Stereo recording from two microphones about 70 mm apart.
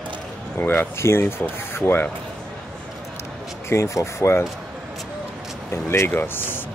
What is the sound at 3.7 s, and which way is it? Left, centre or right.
Speech, left.